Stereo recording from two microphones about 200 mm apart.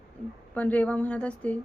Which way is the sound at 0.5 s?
5° left (ahead or behind).